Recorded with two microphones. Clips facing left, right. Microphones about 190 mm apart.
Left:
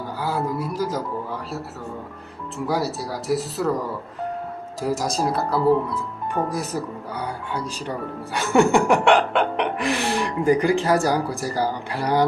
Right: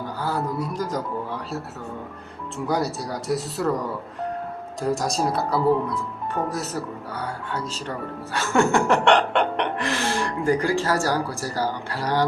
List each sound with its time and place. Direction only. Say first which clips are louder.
0.2 s speech: left 1 dB; 10° left (ahead or behind)
2.6 s speech: even; 5° left (ahead or behind)
7.2 s speech: left 2 dB; 15° left (ahead or behind)